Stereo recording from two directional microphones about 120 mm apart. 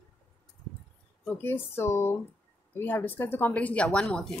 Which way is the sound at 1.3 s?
15° left (ahead or behind).